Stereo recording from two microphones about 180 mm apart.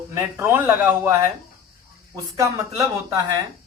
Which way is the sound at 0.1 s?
15° right (ahead or behind).